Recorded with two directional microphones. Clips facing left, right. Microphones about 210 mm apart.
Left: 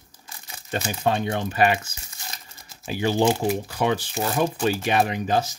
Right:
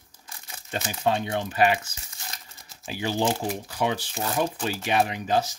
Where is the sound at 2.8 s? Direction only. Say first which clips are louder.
Left 5 dB; 50° left (ahead or behind).